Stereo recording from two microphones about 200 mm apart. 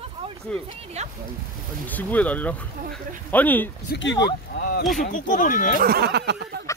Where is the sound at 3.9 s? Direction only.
60° left (ahead or behind).